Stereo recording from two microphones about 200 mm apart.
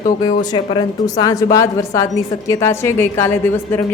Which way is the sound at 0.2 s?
25° left (ahead or behind).